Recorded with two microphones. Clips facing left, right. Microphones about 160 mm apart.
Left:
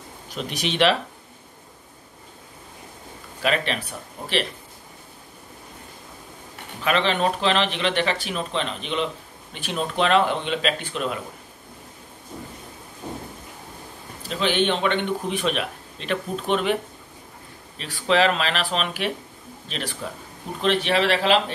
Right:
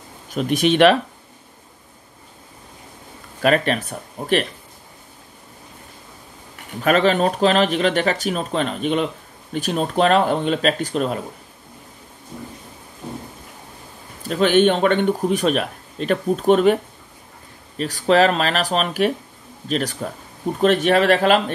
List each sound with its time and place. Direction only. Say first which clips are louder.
0.3 s speech: right 10 dB; 50° right (ahead or behind)
3.4 s speech: right 6 dB; 45° right (ahead or behind)
6.8 s speech: right 5 dB; 45° right (ahead or behind)
14.3 s speech: right 7 dB; 45° right (ahead or behind)
17.7 s speech: right 5 dB; 40° right (ahead or behind)